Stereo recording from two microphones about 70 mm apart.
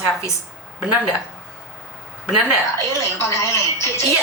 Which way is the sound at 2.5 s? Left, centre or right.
Left.